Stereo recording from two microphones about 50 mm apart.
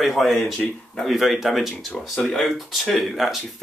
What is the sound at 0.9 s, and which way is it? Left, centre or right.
Speech, centre.